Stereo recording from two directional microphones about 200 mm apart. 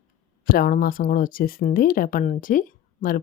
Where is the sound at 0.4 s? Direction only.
45° left (ahead or behind).